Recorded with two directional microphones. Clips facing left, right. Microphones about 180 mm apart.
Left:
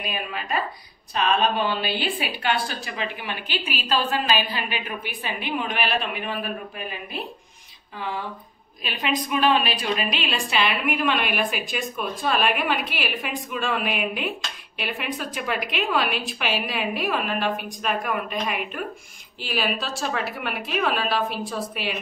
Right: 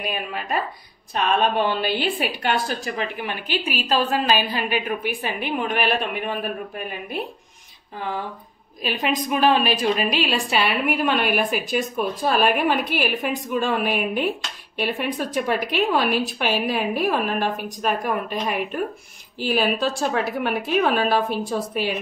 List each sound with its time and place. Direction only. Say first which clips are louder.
0.0 s a woman's voice: right 2 dB; 45° right (ahead or behind)
8.8 s a woman's voice: right 3 dB; 45° right (ahead or behind)